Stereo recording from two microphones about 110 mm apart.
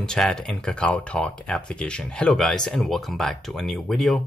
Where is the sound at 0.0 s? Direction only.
5° left (ahead or behind).